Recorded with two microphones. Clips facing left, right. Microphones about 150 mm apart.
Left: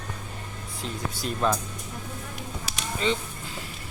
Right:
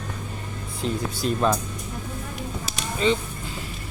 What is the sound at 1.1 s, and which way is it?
Speech, 25° right (ahead or behind).